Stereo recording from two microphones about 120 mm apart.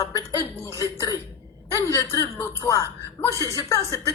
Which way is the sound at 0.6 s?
25° left (ahead or behind).